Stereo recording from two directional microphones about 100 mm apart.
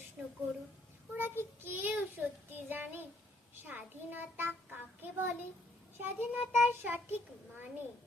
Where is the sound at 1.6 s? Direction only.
20° right (ahead or behind).